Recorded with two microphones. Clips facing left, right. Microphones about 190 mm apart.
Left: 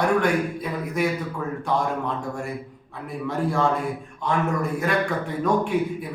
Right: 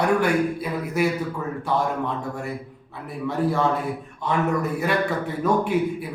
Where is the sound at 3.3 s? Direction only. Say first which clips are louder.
Right 1 dB; 5° right (ahead or behind).